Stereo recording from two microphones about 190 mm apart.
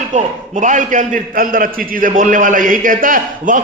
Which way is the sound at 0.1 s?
40° right (ahead or behind).